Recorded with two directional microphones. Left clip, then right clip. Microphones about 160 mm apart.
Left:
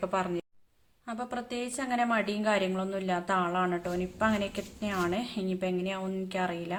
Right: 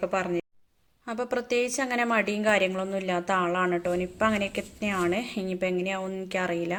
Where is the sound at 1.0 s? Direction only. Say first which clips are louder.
Right 7 dB; 30° right (ahead or behind).